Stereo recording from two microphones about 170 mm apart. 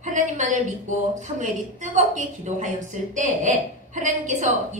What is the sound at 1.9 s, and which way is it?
A woman's voice, 45° right (ahead or behind).